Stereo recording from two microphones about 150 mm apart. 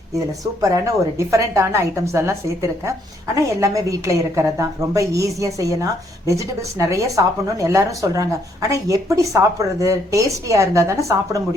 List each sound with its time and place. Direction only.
0.9 s a woman's voice: 20° right (ahead or behind)